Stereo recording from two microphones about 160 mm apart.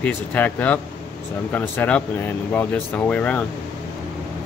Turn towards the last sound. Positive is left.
turn(degrees=10)  # may be behind; listen again after turning